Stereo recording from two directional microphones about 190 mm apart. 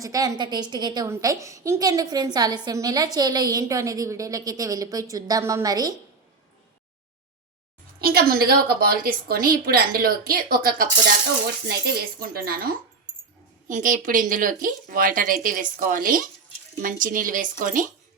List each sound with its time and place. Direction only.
0.0 s a woman's voice: 20° right (ahead or behind)
8.0 s a woman's voice: 55° right (ahead or behind)